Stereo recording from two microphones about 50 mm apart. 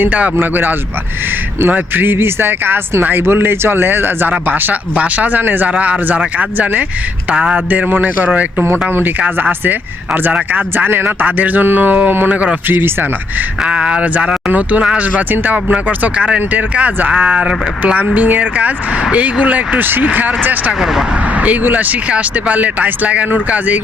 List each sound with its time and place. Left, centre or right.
0.0 s speech: right
0.3 s speech: right
5.7 s speech: right
7.7 s speech: right
11.0 s speech: right
13.7 s speech: right
14.5 s speech: right